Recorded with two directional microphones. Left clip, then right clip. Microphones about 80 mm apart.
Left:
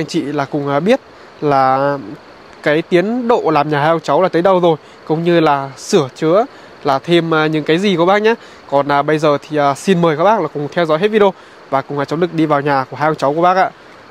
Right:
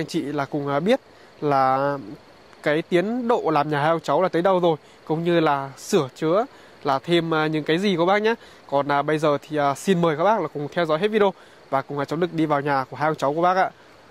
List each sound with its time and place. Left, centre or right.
0.0 s speech: right